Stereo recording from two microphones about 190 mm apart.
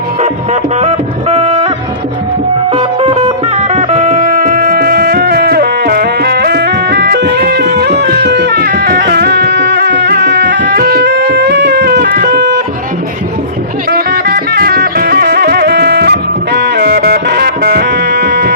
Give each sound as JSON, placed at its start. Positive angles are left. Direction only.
{"t": 0.8, "sound": "a sound", "side_deg": -35}
{"t": 2.7, "sound": "music", "side_deg": -30}
{"t": 13.9, "sound": "music", "side_deg": -55}